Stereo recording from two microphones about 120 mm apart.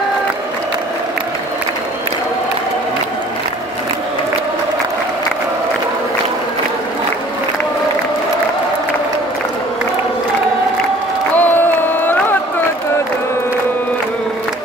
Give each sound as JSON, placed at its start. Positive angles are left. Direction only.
{"t": 11.3, "sound": "crowd", "side_deg": 15}